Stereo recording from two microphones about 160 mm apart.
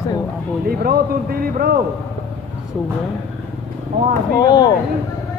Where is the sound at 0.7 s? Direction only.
70° right (ahead or behind).